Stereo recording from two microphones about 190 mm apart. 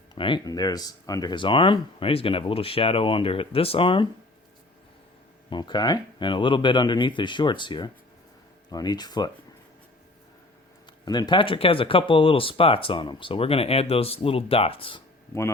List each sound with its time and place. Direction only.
0.1 s speech: 25° left (ahead or behind)
5.5 s speech: 25° left (ahead or behind)
11.0 s speech: 20° left (ahead or behind)
15.3 s speech: 15° left (ahead or behind)